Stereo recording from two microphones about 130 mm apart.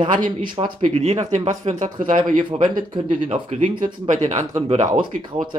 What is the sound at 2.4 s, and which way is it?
Speech, 40° right (ahead or behind).